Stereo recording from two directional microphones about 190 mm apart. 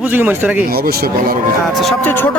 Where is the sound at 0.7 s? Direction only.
55° right (ahead or behind).